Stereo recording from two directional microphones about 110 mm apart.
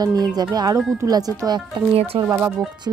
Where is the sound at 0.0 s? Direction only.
40° right (ahead or behind).